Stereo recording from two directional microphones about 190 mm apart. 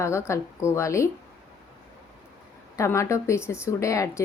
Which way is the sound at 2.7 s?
15° left (ahead or behind).